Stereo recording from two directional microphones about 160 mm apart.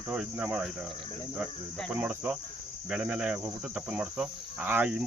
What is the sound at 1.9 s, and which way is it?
Speech, 10° right (ahead or behind).